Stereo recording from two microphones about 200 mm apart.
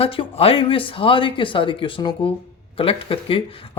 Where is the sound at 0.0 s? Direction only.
30° left (ahead or behind).